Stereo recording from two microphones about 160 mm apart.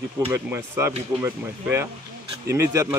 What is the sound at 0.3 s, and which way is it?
Speech, 15° right (ahead or behind).